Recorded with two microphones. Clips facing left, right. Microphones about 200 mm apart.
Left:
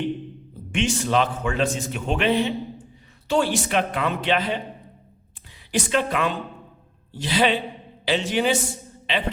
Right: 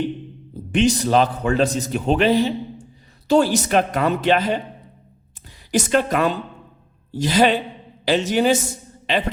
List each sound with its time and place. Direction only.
0.7 s a man's voice: 35° right (ahead or behind)
5.7 s a man's voice: 40° right (ahead or behind)